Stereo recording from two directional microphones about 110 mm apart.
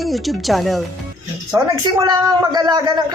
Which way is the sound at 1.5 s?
25° right (ahead or behind).